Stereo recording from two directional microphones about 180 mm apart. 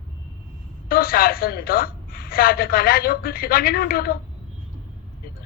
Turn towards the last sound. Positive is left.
turn(degrees=55)  # may be behind; listen again after turning